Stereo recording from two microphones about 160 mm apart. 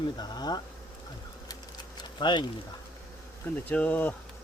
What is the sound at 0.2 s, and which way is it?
Speech, 25° left (ahead or behind).